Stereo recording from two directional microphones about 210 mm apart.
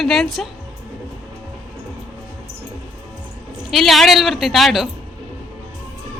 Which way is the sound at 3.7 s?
Centre (ahead or behind).